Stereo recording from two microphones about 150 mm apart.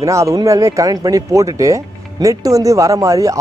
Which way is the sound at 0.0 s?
20° right (ahead or behind).